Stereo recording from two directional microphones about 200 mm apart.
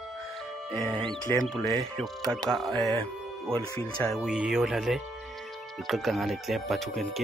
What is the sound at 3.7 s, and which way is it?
Speech, 15° left (ahead or behind).